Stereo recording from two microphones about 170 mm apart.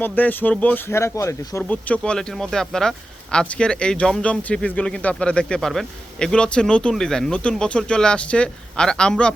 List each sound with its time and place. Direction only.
0.0 s speech: 10° left (ahead or behind)